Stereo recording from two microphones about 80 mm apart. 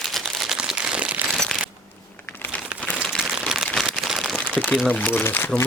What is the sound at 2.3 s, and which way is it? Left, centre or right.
Crumpling, left.